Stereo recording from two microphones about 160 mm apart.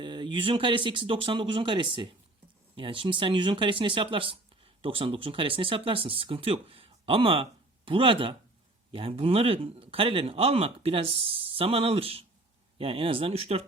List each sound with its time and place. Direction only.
0.0 s a man's voice: 30° right (ahead or behind)